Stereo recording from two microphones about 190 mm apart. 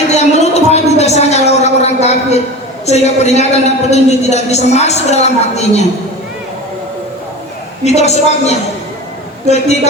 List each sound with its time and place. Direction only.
0.1 s a sound: 35° left (ahead or behind)
2.8 s a man's voice: 35° left (ahead or behind)
7.9 s a man's voice: 35° left (ahead or behind)